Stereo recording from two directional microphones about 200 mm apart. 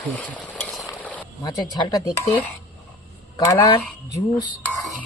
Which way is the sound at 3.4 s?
20° left (ahead or behind).